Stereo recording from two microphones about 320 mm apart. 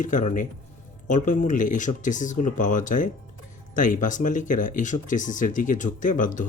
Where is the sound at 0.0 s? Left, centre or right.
Left.